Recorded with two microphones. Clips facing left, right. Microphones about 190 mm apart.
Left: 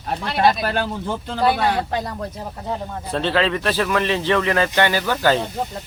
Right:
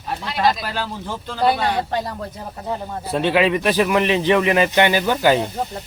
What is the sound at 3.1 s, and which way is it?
Speech, 15° right (ahead or behind).